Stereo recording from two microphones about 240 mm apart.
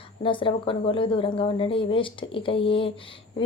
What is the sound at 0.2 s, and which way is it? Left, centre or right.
A woman's voice, left.